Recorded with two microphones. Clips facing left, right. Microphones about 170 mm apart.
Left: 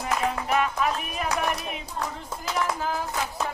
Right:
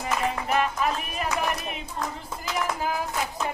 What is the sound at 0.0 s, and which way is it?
Music, centre (ahead or behind).